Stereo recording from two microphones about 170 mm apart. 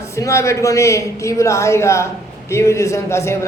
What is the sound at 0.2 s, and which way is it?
A man's voice, 20° left (ahead or behind).